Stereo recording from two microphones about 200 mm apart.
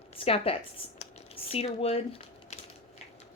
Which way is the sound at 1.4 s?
30° left (ahead or behind).